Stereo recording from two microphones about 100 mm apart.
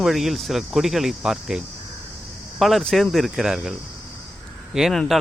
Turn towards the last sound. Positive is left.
turn(degrees=0)  # may be behind; listen again after turning